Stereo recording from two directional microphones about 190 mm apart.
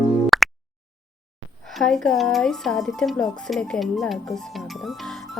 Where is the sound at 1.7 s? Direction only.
Centre (ahead or behind).